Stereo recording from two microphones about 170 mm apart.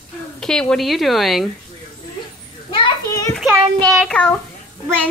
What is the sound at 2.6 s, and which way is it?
Children playing, 25° left (ahead or behind).